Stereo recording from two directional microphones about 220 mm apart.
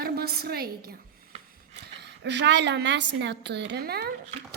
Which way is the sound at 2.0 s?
50° right (ahead or behind).